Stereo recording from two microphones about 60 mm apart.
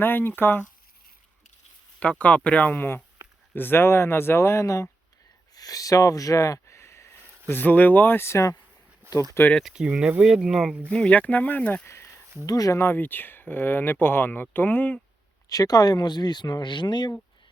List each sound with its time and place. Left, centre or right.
0.0 s speech: left
2.0 s speech: left
2.6 s speech: left
5.5 s speech: left
7.4 s speech: left
9.0 s a sound: right
9.6 s speech: centre
11.1 s speech: left
12.5 s speech: left
12.7 s speech: left
15.4 s speech: left
16.4 s speech: left